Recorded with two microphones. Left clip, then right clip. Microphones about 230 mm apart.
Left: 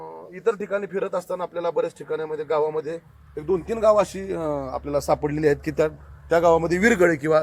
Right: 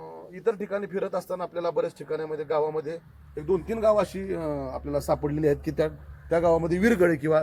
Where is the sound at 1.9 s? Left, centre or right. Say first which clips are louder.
Left 3 dB; centre.